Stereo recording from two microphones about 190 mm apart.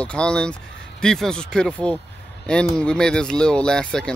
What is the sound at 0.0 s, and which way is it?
Speech, 5° left (ahead or behind).